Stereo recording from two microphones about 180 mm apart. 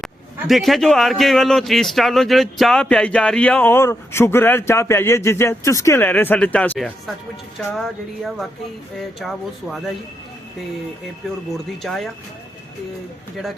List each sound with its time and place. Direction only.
0.0 s a man's voice: centre (ahead or behind)
11.5 s speech: centre (ahead or behind)